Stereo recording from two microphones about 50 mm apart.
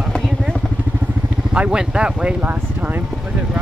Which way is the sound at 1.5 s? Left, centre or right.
Centre.